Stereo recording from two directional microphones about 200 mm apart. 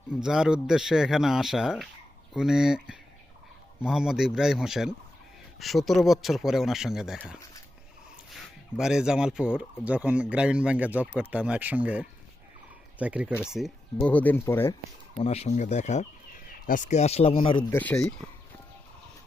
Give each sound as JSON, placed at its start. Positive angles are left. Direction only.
{"t": 0.1, "sound": "speech", "side_deg": -5}
{"t": 15.1, "sound": "speech", "side_deg": 30}
{"t": 17.7, "sound": "speech", "side_deg": 10}